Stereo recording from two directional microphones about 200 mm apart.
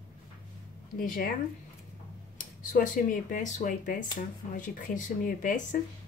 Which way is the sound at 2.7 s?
40° left (ahead or behind).